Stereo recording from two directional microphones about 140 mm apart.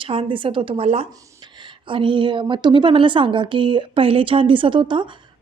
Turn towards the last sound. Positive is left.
turn(degrees=-35)  # may be behind; listen again after turning